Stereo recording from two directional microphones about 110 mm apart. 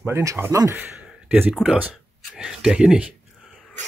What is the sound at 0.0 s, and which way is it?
Speech, 25° right (ahead or behind).